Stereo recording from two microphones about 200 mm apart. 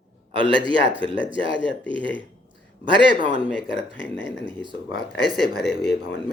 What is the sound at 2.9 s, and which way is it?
Speech, 25° right (ahead or behind).